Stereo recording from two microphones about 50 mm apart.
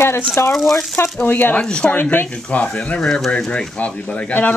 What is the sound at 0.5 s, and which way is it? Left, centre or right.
Speech, centre.